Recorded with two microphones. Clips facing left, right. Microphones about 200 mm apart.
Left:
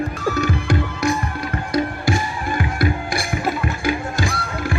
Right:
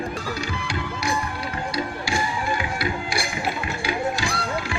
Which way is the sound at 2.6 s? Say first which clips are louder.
Left 5 dB; 55° left (ahead or behind).